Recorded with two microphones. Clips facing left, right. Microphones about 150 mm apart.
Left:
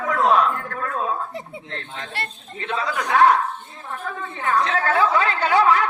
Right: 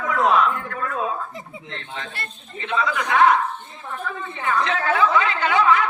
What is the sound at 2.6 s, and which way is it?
Speech, 40° left (ahead or behind).